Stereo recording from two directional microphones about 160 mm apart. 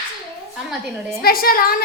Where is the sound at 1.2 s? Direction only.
70° left (ahead or behind).